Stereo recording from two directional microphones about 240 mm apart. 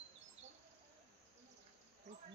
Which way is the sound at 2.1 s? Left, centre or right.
Right.